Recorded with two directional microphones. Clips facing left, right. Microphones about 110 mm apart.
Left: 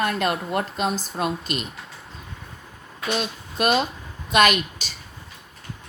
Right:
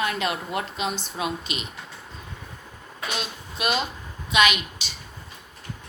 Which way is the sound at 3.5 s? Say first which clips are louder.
Left 5 dB; 45° left (ahead or behind).